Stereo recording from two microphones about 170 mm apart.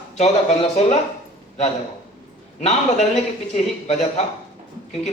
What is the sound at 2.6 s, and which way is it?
A man's voice, 40° left (ahead or behind).